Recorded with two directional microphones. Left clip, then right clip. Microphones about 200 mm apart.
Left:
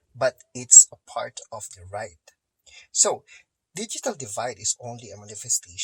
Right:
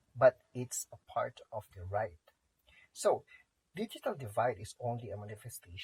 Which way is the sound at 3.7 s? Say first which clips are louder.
Left 8 dB; 25° left (ahead or behind).